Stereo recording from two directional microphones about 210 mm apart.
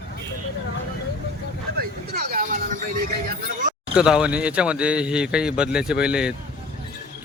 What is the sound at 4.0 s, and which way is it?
Speech, 5° right (ahead or behind).